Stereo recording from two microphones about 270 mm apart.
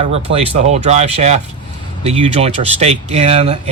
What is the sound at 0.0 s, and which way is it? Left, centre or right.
Speech, right.